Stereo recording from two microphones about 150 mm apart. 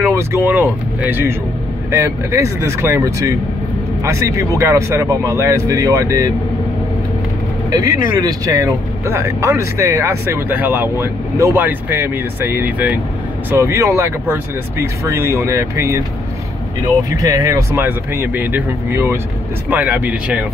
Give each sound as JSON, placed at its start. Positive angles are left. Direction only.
{"t": 0.0, "sound": "speech", "side_deg": -15}
{"t": 7.7, "sound": "speech", "side_deg": -25}
{"t": 17.1, "sound": "speech", "side_deg": -25}